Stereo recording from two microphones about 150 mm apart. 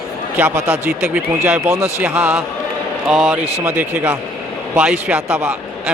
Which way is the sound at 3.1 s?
5° right (ahead or behind).